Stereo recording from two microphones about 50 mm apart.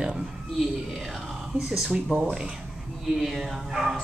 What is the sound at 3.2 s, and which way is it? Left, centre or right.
Speech, centre.